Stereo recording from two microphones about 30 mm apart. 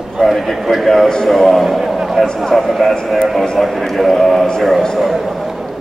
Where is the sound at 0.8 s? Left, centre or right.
Centre.